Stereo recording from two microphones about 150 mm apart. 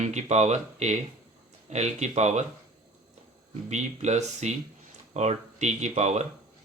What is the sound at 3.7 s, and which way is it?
Speech, 50° right (ahead or behind).